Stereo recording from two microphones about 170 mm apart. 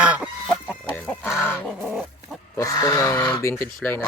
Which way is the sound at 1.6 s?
Centre (ahead or behind).